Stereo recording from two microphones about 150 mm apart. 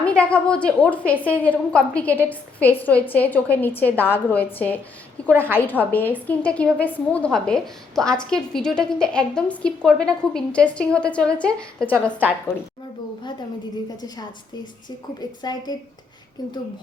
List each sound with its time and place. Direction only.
0.0 s a woman's voice: 10° left (ahead or behind)
5.2 s a sound: 10° left (ahead or behind)
5.5 s a woman's voice: 10° left (ahead or behind)
13.9 s a woman's voice: 25° left (ahead or behind)
15.4 s a woman's voice: 30° left (ahead or behind)